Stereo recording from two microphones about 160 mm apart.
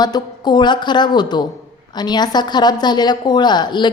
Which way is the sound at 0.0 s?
25° left (ahead or behind).